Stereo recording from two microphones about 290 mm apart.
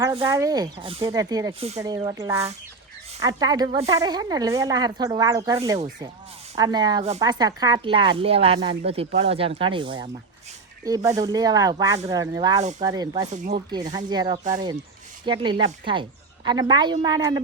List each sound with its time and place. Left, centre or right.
0.0 s speech: centre
13.3 s speech: right
13.9 s speech: centre
14.4 s speech: right